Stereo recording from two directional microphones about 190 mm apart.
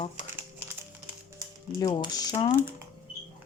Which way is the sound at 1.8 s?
20° left (ahead or behind).